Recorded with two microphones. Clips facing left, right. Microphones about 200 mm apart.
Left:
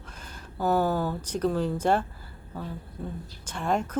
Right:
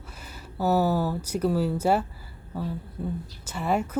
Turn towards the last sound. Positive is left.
turn(degrees=-5)  # may be behind; listen again after turning